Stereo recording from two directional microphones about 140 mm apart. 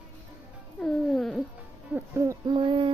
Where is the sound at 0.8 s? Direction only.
Centre (ahead or behind).